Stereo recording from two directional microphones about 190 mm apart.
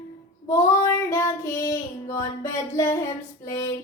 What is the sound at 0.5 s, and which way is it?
Child singing, 15° left (ahead or behind).